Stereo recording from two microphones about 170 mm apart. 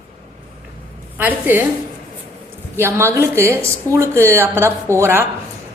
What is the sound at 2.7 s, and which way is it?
A woman's voice, 15° right (ahead or behind).